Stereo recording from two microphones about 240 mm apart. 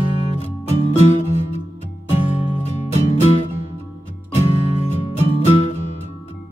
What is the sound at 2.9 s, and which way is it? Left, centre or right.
Music, left.